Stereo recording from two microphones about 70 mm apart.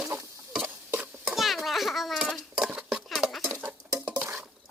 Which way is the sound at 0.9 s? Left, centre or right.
Right.